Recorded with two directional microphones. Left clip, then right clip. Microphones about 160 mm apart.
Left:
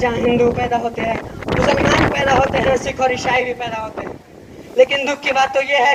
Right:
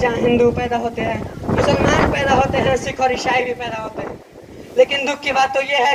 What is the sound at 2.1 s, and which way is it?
Speech, 20° right (ahead or behind).